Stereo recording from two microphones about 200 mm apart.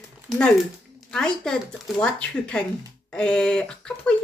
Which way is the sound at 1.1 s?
5° left (ahead or behind).